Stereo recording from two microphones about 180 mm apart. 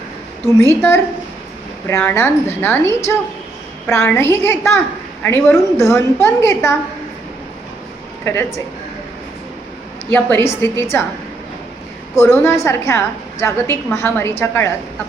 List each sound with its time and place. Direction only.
0.6 s a woman's voice: 15° left (ahead or behind)
8.2 s a woman's voice: 15° left (ahead or behind)
10.1 s a woman's voice: 15° left (ahead or behind)
12.1 s a woman's voice: 15° left (ahead or behind)